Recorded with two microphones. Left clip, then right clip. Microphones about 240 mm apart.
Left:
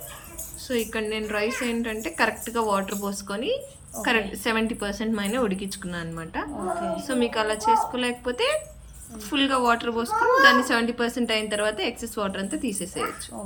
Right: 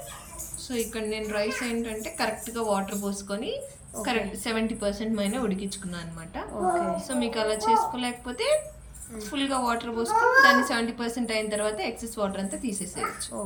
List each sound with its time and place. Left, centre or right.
0.7 s a woman's voice: centre